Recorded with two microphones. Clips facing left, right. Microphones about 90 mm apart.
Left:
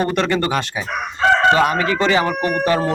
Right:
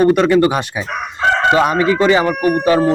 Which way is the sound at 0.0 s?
10° right (ahead or behind).